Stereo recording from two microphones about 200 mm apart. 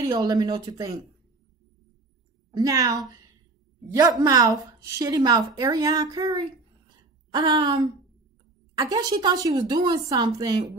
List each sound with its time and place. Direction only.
0.0 s a woman's voice: 20° right (ahead or behind)
2.5 s a woman's voice: 15° right (ahead or behind)
4.2 s a woman's voice: 20° right (ahead or behind)